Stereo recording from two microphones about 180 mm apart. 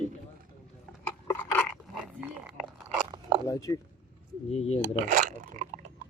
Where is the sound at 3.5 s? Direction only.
20° left (ahead or behind).